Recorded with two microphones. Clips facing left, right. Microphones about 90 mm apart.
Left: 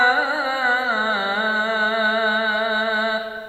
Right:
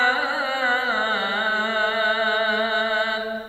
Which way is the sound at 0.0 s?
15° left (ahead or behind).